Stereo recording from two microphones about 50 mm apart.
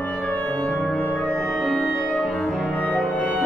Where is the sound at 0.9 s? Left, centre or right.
Left.